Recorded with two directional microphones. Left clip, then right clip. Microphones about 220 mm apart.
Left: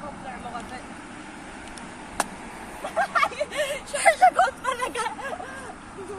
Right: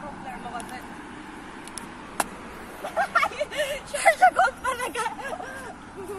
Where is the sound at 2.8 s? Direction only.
5° left (ahead or behind).